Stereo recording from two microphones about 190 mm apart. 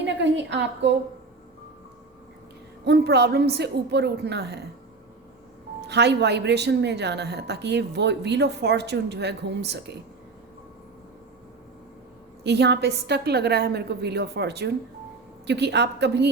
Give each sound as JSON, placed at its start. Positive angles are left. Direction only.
{"t": 0.0, "sound": "a woman's voice", "side_deg": -70}
{"t": 2.8, "sound": "a woman's voice", "side_deg": -60}
{"t": 5.9, "sound": "a woman's voice", "side_deg": -65}
{"t": 12.4, "sound": "a woman's voice", "side_deg": -65}